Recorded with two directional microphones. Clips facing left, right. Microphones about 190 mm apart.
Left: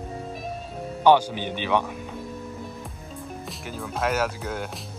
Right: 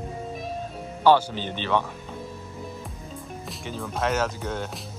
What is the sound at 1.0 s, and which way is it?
Speech, 15° left (ahead or behind).